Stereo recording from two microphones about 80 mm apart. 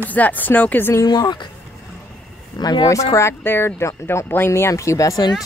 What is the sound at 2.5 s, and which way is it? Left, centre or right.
Speech, left.